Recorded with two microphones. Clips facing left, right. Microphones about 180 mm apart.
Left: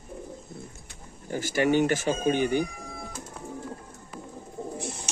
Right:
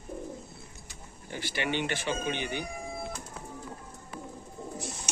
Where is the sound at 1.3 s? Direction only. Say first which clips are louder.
Left 9 dB; 45° left (ahead or behind).